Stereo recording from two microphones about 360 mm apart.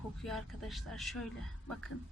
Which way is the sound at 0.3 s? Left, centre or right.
Centre.